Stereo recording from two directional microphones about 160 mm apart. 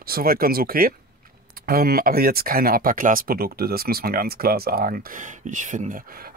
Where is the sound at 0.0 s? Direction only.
70° right (ahead or behind).